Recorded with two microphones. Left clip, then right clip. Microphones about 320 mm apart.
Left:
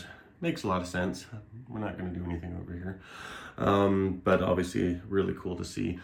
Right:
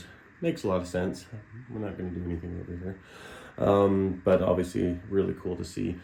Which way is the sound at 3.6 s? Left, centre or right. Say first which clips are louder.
Right 3 dB; left.